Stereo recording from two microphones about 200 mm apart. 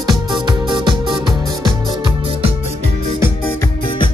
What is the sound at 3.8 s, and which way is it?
Music, 25° left (ahead or behind).